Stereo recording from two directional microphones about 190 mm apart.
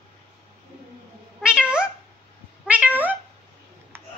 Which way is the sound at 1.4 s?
5° right (ahead or behind).